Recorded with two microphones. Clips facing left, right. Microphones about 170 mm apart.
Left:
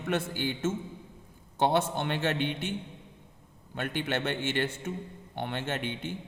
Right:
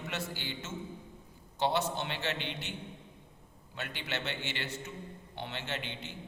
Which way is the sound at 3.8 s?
50° left (ahead or behind).